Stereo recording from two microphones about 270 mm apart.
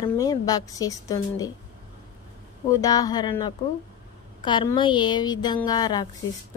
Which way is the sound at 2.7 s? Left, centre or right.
Centre.